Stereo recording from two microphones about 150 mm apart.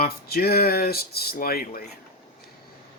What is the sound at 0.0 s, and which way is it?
Speech, 90° left.